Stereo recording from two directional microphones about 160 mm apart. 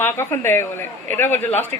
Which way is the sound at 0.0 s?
15° left (ahead or behind).